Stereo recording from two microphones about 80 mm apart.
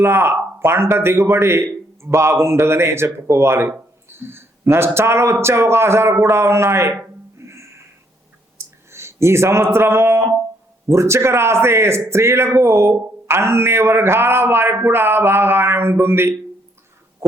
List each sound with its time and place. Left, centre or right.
0.0 s speech: right
7.3 s music: right
8.9 s speech: right